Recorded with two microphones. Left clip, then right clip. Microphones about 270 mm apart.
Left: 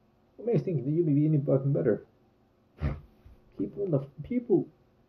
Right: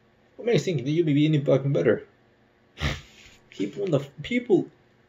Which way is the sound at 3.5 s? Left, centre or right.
Centre.